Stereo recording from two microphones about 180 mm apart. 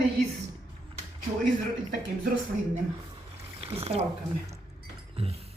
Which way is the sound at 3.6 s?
35° right (ahead or behind).